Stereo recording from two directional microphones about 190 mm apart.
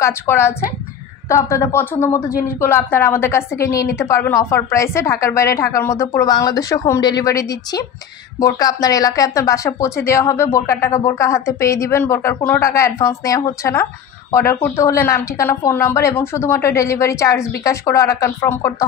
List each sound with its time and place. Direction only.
0.0 s a woman's voice: 15° left (ahead or behind)